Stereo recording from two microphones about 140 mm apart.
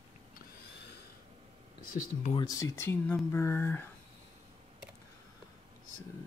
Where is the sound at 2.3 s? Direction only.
25° left (ahead or behind).